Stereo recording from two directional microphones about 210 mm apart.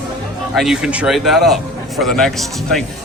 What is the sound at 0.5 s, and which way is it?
Speech, centre (ahead or behind).